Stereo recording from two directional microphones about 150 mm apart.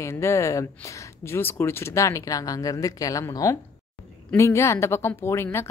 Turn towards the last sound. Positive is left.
turn(degrees=15)  # may be behind; listen again after turning